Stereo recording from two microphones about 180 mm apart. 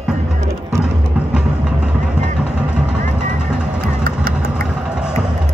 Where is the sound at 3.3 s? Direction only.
5° right (ahead or behind).